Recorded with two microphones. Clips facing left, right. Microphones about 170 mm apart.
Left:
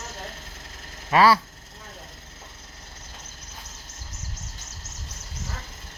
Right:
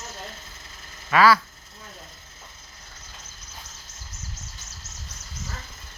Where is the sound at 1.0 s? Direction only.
30° left (ahead or behind).